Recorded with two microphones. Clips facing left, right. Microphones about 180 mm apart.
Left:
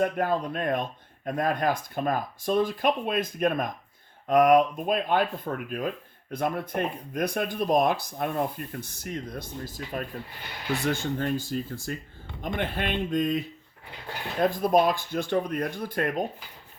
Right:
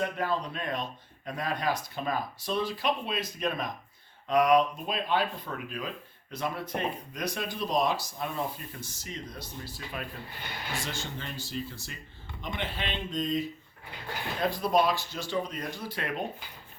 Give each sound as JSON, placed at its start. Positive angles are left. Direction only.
{"t": 0.0, "sound": "speech", "side_deg": 50}
{"t": 10.7, "sound": "speech", "side_deg": 60}
{"t": 14.5, "sound": "speech", "side_deg": 50}